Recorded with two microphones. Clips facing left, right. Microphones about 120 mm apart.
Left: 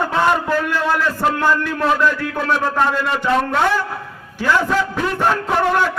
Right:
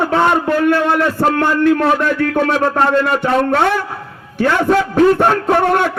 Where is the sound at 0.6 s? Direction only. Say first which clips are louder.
Right 5 dB; 60° right (ahead or behind).